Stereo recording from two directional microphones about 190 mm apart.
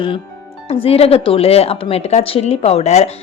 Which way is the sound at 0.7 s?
30° left (ahead or behind).